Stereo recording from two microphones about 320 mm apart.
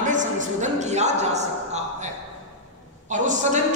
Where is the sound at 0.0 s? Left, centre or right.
Right.